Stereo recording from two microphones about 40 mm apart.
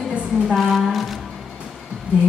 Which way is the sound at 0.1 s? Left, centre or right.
Right.